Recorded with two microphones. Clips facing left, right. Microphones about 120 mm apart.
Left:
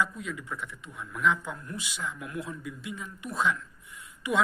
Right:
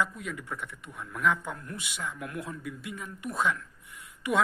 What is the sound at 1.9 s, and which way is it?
A man's voice, 55° right (ahead or behind).